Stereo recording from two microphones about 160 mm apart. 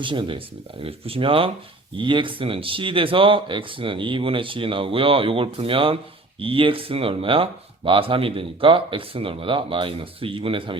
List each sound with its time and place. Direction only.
0.0 s speech: 30° right (ahead or behind)